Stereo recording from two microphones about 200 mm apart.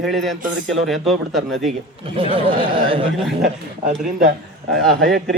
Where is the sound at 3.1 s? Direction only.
Centre (ahead or behind).